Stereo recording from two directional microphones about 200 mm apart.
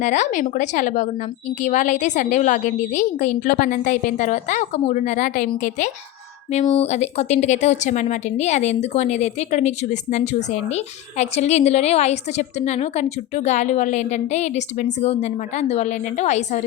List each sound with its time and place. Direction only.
0.0 s a woman's voice: 35° left (ahead or behind)
6.5 s a woman's voice: 30° left (ahead or behind)